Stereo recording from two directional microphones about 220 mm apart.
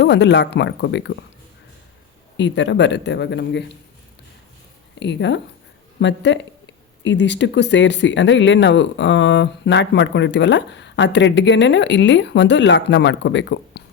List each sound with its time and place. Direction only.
0.0 s speech: 50° left (ahead or behind)
2.4 s speech: 55° left (ahead or behind)
4.9 s speech: 55° left (ahead or behind)